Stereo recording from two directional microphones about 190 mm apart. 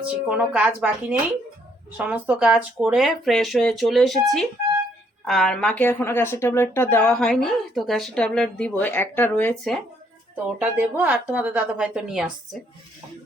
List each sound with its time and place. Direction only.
0.0 s a woman's voice: 5° right (ahead or behind)
2.0 s speech: 10° right (ahead or behind); by 9.7 s 10° left (ahead or behind)
10.3 s a woman's voice: 5° right (ahead or behind)